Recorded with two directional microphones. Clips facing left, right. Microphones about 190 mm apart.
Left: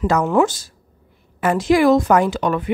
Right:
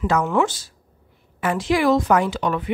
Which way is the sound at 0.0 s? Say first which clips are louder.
Left 3 dB; 40° left (ahead or behind).